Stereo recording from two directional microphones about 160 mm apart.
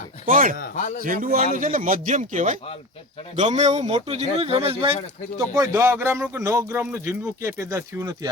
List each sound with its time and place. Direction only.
0.3 s a man's voice: 60° right (ahead or behind); by 4.9 s 35° right (ahead or behind)
5.4 s speech: 20° right (ahead or behind)